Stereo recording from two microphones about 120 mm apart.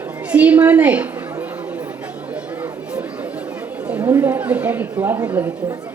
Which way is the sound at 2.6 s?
10° right (ahead or behind).